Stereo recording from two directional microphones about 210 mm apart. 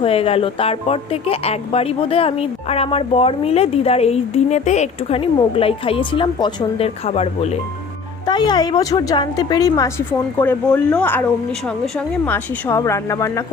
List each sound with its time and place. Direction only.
0.0 s speech: 25° left (ahead or behind)
8.3 s a woman's voice: 20° left (ahead or behind)